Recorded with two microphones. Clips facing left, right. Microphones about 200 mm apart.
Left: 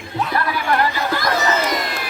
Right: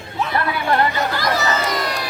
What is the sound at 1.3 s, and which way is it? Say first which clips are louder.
Crowd: left 3 dB; 40° right (ahead or behind).